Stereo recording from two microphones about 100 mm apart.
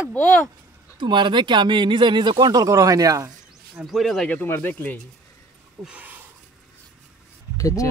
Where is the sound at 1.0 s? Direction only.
55° right (ahead or behind); by 3.3 s 35° right (ahead or behind).